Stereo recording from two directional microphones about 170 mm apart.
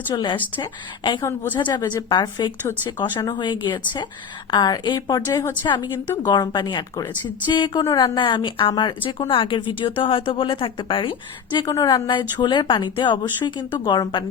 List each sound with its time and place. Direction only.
0.1 s a woman's voice: 25° left (ahead or behind)